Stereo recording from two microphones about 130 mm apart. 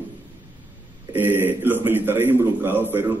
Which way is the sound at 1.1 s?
15° right (ahead or behind).